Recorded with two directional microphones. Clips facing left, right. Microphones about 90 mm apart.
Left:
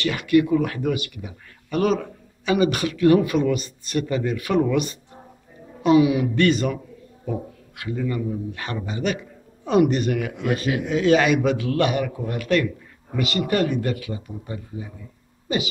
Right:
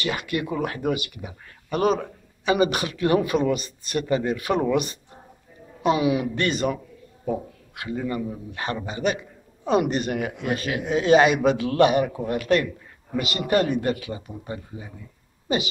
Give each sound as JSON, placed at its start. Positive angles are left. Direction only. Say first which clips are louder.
{"t": 0.0, "sound": "speech", "louder": "left 8 dB", "side_deg": -20}
{"t": 4.1, "sound": "a woman's voice", "louder": "right 1 dB", "side_deg": -30}